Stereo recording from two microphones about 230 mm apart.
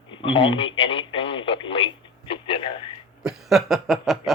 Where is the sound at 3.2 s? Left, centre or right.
Centre.